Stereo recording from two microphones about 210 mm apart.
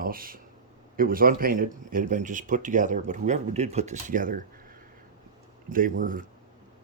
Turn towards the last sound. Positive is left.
turn(degrees=-40)  # may be behind; listen again after turning